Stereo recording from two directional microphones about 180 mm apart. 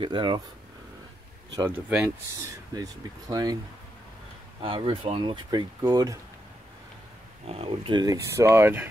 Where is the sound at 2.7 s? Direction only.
20° right (ahead or behind).